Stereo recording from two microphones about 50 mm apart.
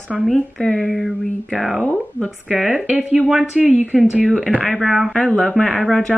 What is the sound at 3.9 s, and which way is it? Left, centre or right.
Speech, right.